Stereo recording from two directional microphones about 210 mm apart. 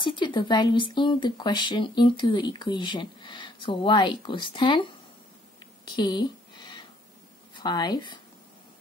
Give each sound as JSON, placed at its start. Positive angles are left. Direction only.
{"t": 0.0, "sound": "speech", "side_deg": 20}
{"t": 5.9, "sound": "speech", "side_deg": 20}
{"t": 7.5, "sound": "speech", "side_deg": 20}